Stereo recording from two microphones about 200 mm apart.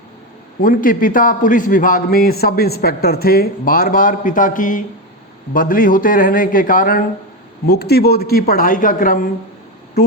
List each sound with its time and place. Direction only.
0.6 s a man's voice: 45° left (ahead or behind)